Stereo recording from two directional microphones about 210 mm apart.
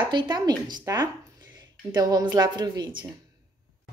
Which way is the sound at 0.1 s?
20° right (ahead or behind).